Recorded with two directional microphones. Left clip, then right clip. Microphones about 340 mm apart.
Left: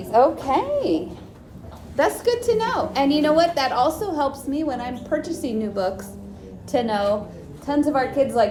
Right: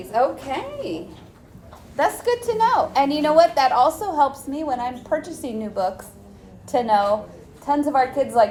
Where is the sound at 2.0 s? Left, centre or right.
Centre.